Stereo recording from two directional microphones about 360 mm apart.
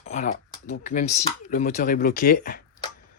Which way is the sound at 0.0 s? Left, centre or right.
Centre.